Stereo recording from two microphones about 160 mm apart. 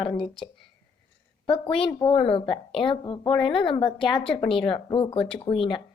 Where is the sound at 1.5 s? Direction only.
35° left (ahead or behind).